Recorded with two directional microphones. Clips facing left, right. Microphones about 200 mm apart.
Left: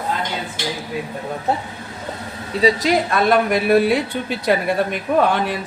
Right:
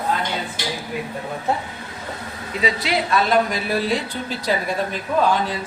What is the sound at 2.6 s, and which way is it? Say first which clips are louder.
Speech: left 6 dB; 40° left (ahead or behind).